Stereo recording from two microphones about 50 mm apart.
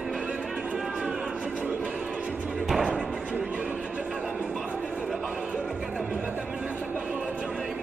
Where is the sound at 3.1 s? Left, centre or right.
Right.